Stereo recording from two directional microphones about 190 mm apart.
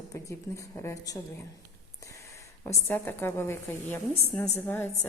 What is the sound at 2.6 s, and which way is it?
A woman's voice, 10° left (ahead or behind).